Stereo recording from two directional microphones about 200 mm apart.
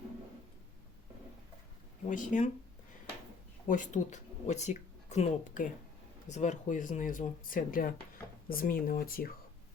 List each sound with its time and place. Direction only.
2.0 s speech: 40° left (ahead or behind)
3.7 s speech: 40° left (ahead or behind)